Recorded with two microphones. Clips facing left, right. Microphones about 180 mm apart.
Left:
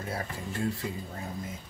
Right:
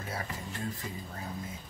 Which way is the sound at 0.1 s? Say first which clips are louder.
Left 2 dB; 30° left (ahead or behind).